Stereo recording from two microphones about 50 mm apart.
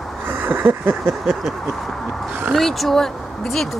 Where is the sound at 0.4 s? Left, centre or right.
Right.